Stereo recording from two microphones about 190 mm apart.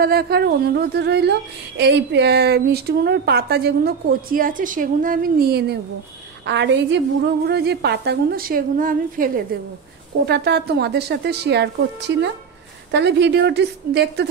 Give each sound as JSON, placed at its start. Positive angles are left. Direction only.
{"t": 0.0, "sound": "a woman's voice", "side_deg": -55}
{"t": 10.2, "sound": "a woman's voice", "side_deg": -60}